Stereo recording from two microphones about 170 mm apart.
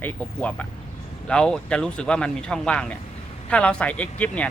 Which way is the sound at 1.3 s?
5° left (ahead or behind).